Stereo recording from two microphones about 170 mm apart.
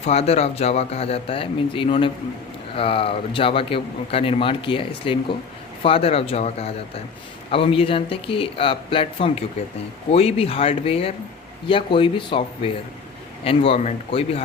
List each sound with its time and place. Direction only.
0.0 s a man's voice: 40° left (ahead or behind)